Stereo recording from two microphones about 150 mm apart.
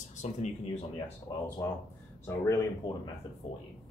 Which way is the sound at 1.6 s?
15° left (ahead or behind).